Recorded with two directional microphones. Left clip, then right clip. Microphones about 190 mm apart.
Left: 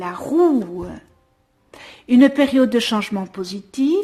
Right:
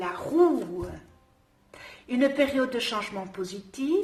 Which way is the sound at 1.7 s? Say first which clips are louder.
Left 13 dB; 50° left (ahead or behind).